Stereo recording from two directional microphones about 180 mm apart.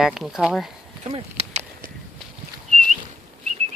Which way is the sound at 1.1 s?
35° right (ahead or behind).